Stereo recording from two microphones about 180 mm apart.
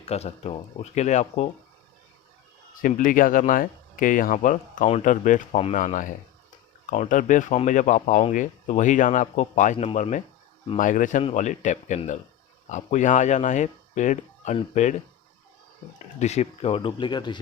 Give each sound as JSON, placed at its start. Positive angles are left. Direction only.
{"t": 0.0, "sound": "speech", "side_deg": 35}
{"t": 2.8, "sound": "speech", "side_deg": 50}
{"t": 16.1, "sound": "speech", "side_deg": 40}